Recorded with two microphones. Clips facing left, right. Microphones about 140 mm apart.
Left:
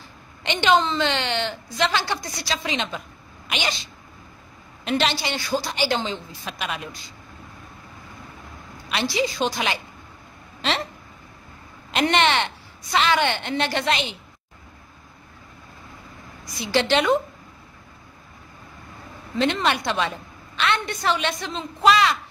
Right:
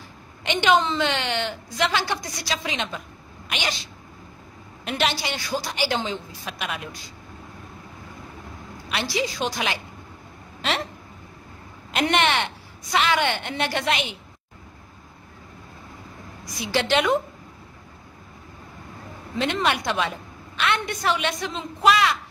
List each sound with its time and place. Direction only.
0.4 s a woman's voice: 5° right (ahead or behind)
4.8 s a woman's voice: 5° right (ahead or behind)
8.8 s a woman's voice: 5° right (ahead or behind)
11.9 s a woman's voice: 5° right (ahead or behind)
16.7 s a woman's voice: 5° right (ahead or behind)
19.3 s a woman's voice: 10° right (ahead or behind)